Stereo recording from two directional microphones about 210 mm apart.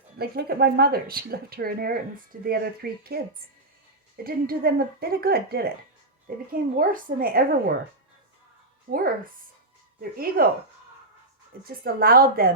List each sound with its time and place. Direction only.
0.2 s speech: 50° right (ahead or behind)
4.2 s speech: 45° right (ahead or behind)
8.9 s speech: 40° right (ahead or behind)
11.8 s speech: 45° right (ahead or behind)